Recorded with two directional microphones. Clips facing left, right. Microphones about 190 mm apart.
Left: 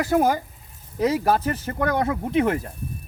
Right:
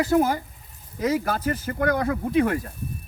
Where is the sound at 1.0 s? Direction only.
30° left (ahead or behind).